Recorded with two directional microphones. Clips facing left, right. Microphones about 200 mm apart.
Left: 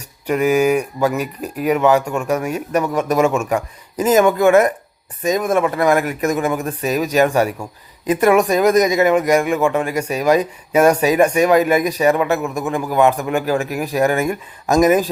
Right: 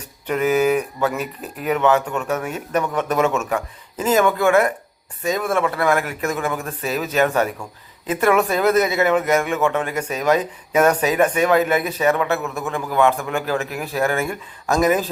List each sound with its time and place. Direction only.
0.3 s speech: 10° left (ahead or behind)